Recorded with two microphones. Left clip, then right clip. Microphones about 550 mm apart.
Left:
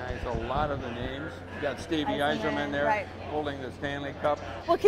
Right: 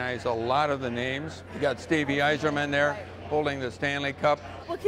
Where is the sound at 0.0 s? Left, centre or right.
Right.